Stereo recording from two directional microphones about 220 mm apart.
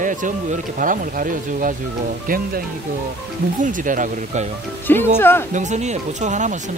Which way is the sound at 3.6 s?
35° right (ahead or behind).